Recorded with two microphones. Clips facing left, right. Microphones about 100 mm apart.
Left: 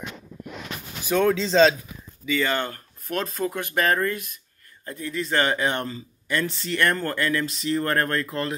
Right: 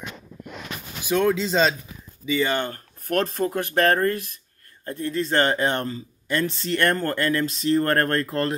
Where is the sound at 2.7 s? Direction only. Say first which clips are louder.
Right 5 dB; 45° right (ahead or behind).